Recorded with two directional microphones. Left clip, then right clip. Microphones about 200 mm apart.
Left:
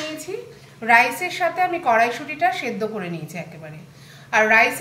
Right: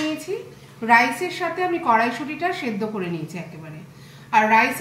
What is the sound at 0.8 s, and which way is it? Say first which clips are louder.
A woman's voice: left 1 dB; 55° left (ahead or behind).